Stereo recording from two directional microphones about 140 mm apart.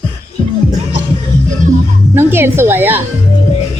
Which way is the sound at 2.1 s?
15° right (ahead or behind).